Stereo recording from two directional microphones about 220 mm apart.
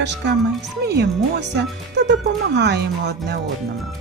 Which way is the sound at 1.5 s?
50° right (ahead or behind).